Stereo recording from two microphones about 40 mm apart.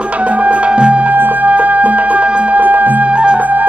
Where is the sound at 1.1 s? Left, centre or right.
Right.